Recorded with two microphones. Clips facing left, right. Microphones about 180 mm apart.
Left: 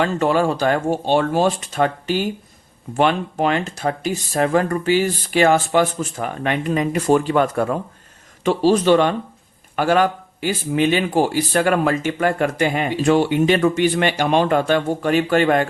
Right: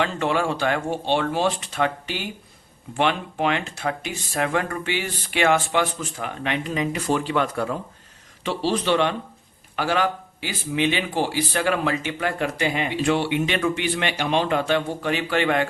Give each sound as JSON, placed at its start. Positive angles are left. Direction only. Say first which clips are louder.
{"t": 0.0, "sound": "a man's voice", "louder": "left 5 dB", "side_deg": 45}